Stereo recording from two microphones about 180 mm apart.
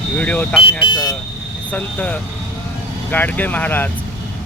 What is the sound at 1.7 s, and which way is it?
Speech, 10° left (ahead or behind).